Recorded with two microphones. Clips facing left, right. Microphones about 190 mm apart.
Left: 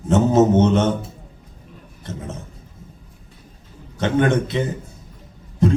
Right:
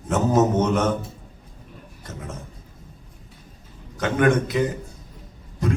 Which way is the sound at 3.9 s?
30° left (ahead or behind).